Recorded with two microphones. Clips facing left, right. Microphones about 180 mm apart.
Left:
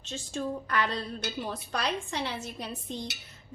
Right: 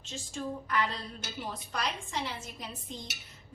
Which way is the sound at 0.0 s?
70° left (ahead or behind).